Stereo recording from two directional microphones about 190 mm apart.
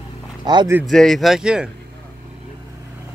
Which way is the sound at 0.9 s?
Centre (ahead or behind).